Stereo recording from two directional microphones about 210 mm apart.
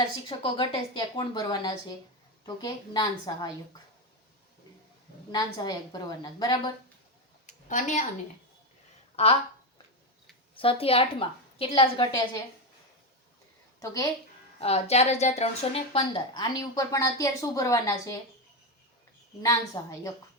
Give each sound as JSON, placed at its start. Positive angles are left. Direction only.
{"t": 0.3, "sound": "a woman's voice", "side_deg": 25}
{"t": 5.3, "sound": "a woman's voice", "side_deg": 20}
{"t": 7.4, "sound": "a sound", "side_deg": 35}
{"t": 10.6, "sound": "a woman's voice", "side_deg": 25}
{"t": 13.7, "sound": "a woman's voice", "side_deg": 15}
{"t": 14.6, "sound": "a woman's voice", "side_deg": 30}
{"t": 19.4, "sound": "a woman's voice", "side_deg": 15}